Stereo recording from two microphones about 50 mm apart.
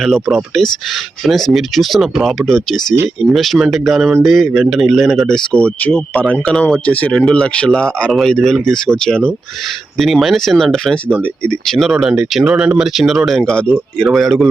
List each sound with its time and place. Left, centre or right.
0.0 s a man's voice: centre
2.5 s a man's voice: centre
5.3 s speech: left
6.5 s speech: centre
6.8 s speech: left
7.1 s speech: centre
10.0 s a man's voice: centre
11.9 s speech: centre
12.7 s a man's voice: centre
13.4 s speech: left
14.0 s a man's voice: centre